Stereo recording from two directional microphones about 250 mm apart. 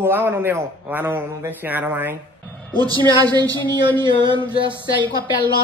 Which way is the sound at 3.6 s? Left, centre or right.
Centre.